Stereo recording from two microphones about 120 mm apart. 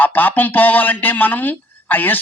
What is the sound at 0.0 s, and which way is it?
Speech, 15° left (ahead or behind).